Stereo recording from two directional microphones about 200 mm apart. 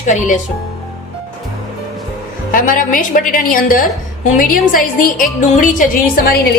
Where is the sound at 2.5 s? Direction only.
45° left (ahead or behind).